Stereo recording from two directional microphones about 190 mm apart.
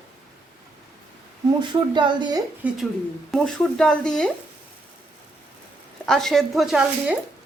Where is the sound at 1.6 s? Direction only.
25° right (ahead or behind).